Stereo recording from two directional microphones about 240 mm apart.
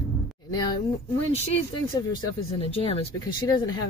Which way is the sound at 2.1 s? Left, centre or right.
Left.